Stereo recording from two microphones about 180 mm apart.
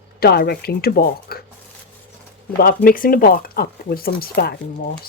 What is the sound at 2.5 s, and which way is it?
Speech, 55° left (ahead or behind).